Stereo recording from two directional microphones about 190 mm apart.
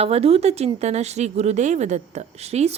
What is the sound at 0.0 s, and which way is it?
Speech, 30° right (ahead or behind).